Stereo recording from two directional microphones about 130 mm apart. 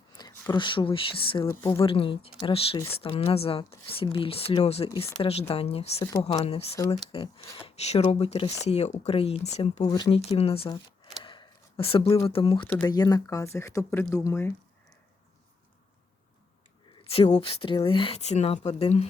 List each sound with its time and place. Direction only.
0.2 s speech: 30° left (ahead or behind)
1.5 s speech: 25° left (ahead or behind)
1.8 s speech: 45° left (ahead or behind)
9.8 s speech: 35° left (ahead or behind)
10.2 s speech: 50° left (ahead or behind)
11.2 s a sound: 40° left (ahead or behind)
12.2 s speech: 45° left (ahead or behind)
12.8 s speech: 30° left (ahead or behind)
16.9 s speech: 45° left (ahead or behind)